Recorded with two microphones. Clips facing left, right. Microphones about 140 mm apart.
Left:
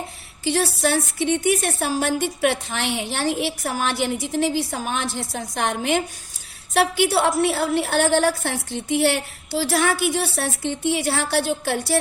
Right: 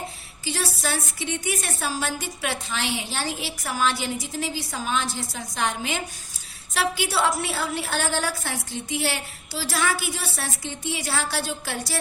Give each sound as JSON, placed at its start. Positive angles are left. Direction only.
{"t": 0.4, "sound": "a woman's voice", "side_deg": 55}